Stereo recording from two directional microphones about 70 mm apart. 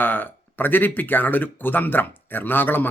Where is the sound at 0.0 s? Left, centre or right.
Left.